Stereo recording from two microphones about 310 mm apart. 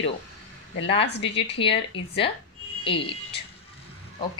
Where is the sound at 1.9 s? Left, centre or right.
Centre.